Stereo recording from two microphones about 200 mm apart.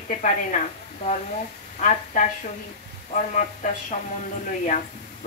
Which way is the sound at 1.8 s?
40° left (ahead or behind).